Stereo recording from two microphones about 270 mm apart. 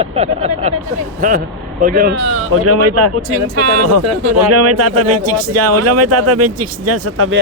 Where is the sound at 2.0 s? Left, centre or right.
Right.